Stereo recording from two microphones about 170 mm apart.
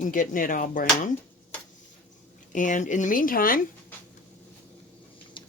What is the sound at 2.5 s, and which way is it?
A woman's voice, 50° left (ahead or behind).